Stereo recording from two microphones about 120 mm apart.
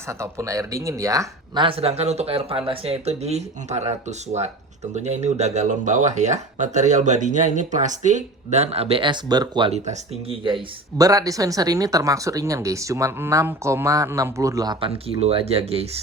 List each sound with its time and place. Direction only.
0.1 s speech: 25° right (ahead or behind)
1.5 s a man's voice: 50° right (ahead or behind)
9.6 s speech: 60° right (ahead or behind)
10.9 s speech: 30° right (ahead or behind)
14.8 s speech: 50° right (ahead or behind)